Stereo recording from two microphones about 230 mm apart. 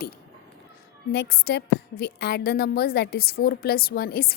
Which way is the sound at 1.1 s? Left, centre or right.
Left.